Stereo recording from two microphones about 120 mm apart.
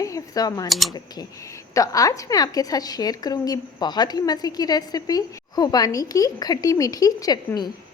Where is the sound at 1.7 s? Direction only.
30° left (ahead or behind).